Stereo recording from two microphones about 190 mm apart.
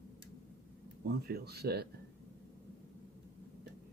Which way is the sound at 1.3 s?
55° right (ahead or behind).